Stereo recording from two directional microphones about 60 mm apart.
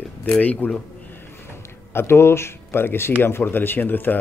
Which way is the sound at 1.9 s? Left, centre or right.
Left.